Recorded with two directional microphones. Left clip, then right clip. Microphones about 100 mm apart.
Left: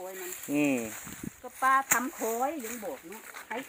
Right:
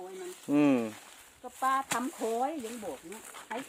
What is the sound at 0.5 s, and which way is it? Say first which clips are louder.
Speech: right 2 dB; 60° right (ahead or behind).